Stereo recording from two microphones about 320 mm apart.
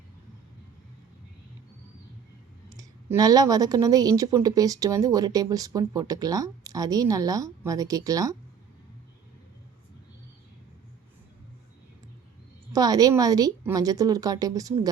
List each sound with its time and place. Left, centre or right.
2.6 s speech: centre
12.7 s speech: centre